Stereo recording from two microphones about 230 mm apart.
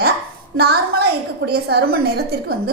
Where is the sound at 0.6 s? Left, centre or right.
Right.